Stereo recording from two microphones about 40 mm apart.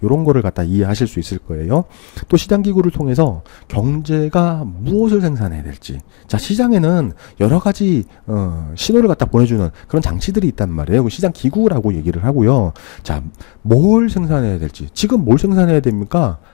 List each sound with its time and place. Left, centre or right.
0.0 s a man's voice: left; by 14.8 s centre
14.9 s speech: left